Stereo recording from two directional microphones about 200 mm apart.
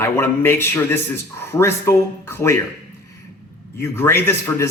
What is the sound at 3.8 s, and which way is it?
Speech, 10° left (ahead or behind).